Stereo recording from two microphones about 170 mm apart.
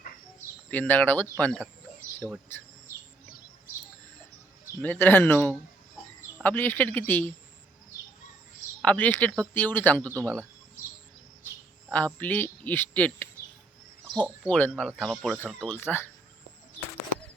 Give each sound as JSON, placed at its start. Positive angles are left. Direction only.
{"t": 0.7, "sound": "a man's voice", "side_deg": 10}
{"t": 4.8, "sound": "a man's voice", "side_deg": 10}
{"t": 8.8, "sound": "a man's voice", "side_deg": 10}
{"t": 11.9, "sound": "a man's voice", "side_deg": 10}
{"t": 14.0, "sound": "a sound", "side_deg": -25}
{"t": 14.4, "sound": "a man's voice", "side_deg": 5}